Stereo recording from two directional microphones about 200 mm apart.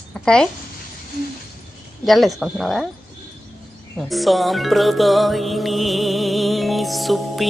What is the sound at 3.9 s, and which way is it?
Speech, centre (ahead or behind).